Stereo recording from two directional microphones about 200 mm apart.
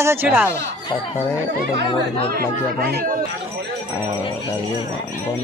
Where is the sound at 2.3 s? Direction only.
50° right (ahead or behind).